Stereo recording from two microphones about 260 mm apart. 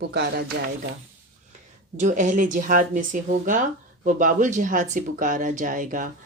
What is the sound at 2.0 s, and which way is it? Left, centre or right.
Speech, right.